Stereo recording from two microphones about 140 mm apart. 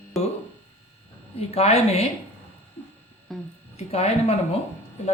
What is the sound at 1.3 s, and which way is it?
Speech, 50° left (ahead or behind).